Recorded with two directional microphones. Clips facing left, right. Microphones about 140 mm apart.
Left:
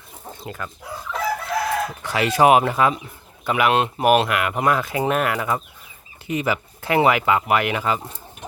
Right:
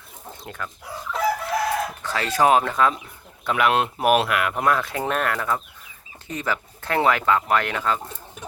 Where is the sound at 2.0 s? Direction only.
15° left (ahead or behind).